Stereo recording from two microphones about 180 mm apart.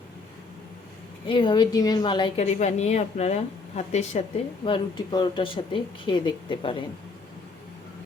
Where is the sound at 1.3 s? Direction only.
25° left (ahead or behind).